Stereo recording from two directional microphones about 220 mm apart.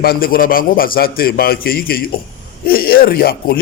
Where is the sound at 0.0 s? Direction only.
45° left (ahead or behind).